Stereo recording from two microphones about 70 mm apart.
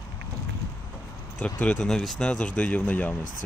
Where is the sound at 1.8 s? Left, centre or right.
Centre.